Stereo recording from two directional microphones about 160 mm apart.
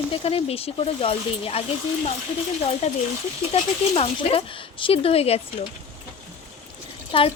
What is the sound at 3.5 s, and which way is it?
Speech, 35° left (ahead or behind).